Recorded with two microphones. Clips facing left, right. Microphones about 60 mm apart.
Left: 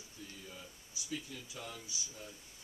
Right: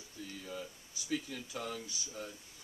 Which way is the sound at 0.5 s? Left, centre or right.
Right.